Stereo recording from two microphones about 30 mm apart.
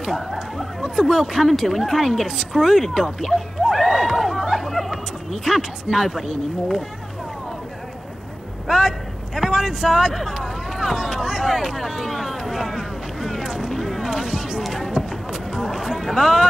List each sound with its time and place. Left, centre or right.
0.3 s a sound: centre
0.8 s speech: centre
1.5 s speech: centre
2.2 s speech: centre
3.2 s speech: centre
4.0 s chatter: centre
5.4 s speech: centre
8.6 s speech: centre
11.9 s a sound: centre
13.4 s vehicle: centre
13.7 s a sound: centre; by 15.1 s right
15.5 s run: centre
16.0 s speech: centre